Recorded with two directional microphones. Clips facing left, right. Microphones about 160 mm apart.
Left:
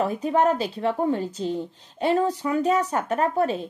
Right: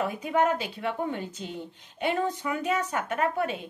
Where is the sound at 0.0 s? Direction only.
35° left (ahead or behind).